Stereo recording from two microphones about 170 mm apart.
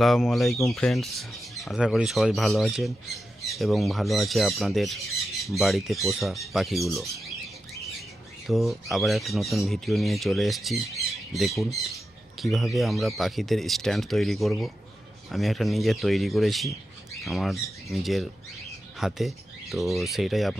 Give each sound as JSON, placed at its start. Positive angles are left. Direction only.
{"t": 0.0, "sound": "speech", "side_deg": 0}
{"t": 8.5, "sound": "speech", "side_deg": 0}